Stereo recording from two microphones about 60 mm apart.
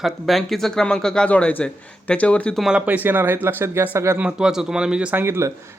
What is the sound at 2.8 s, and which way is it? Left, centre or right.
Speech, right.